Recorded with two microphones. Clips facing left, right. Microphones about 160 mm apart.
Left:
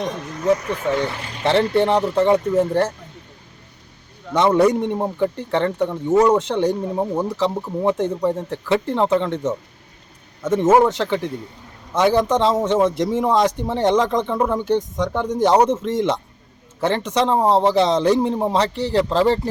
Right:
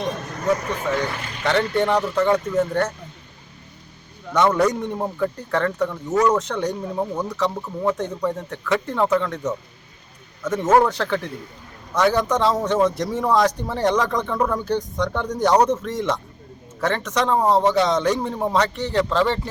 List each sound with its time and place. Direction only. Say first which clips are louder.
0.9 s speech: left 2 dB; 30° left (ahead or behind)
4.4 s speech: left 3 dB; 25° left (ahead or behind)
10.7 s speech: left 2 dB; 15° left (ahead or behind); by 19.4 s 35° left (ahead or behind)